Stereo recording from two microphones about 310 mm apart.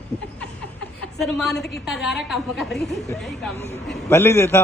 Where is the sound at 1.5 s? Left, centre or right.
Left.